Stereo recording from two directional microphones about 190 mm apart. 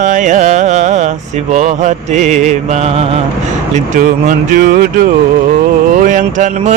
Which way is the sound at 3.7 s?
45° right (ahead or behind).